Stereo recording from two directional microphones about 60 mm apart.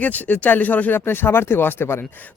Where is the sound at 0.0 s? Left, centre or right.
Left.